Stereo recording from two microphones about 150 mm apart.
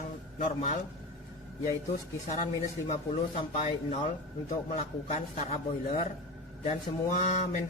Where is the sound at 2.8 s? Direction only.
45° left (ahead or behind).